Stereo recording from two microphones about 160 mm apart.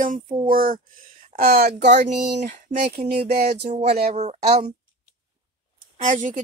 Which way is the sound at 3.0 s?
75° right (ahead or behind).